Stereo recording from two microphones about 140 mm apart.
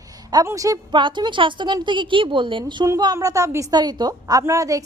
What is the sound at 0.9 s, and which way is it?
A woman's voice, 35° right (ahead or behind).